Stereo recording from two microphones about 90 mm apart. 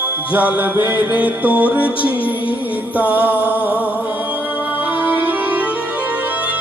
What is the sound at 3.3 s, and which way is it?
Music, 20° left (ahead or behind).